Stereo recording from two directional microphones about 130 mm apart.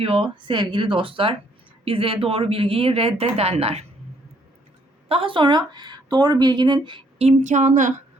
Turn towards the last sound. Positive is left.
turn(degrees=-75)  # may be behind; listen again after turning